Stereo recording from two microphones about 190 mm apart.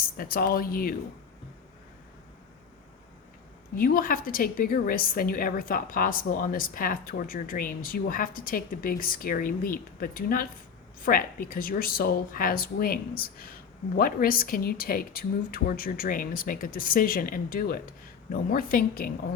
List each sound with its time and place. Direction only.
0.0 s a woman's voice: 50° left (ahead or behind)
3.8 s a woman's voice: 50° left (ahead or behind)